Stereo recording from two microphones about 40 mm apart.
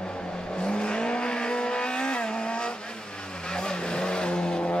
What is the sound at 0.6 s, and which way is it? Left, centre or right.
Vehicle, left.